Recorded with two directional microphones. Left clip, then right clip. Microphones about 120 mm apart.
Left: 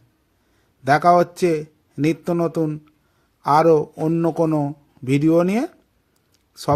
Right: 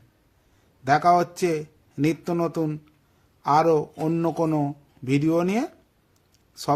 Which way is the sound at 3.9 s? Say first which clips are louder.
Left 4 dB; 25° left (ahead or behind).